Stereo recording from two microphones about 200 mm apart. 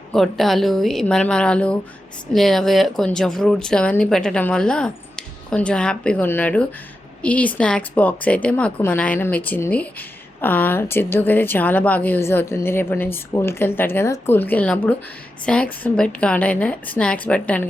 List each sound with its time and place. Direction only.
0.1 s a woman's voice: centre (ahead or behind)